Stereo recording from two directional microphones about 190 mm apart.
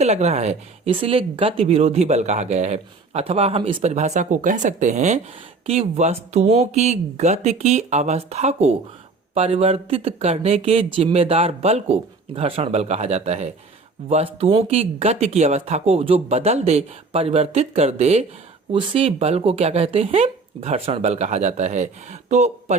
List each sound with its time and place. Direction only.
0.0 s speech: 35° right (ahead or behind)